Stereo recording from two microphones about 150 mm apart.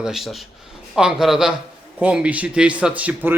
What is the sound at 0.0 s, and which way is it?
Speech, centre (ahead or behind).